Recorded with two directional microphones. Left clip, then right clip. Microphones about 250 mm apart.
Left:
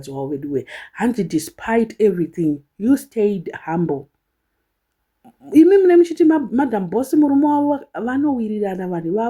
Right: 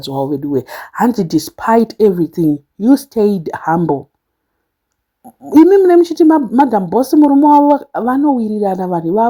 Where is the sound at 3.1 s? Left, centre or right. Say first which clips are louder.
Right 5 dB; centre.